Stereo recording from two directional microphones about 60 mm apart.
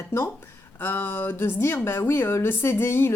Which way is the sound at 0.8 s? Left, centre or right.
Left.